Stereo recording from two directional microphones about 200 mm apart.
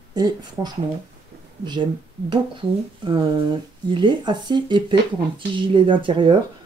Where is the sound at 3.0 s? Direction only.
20° right (ahead or behind).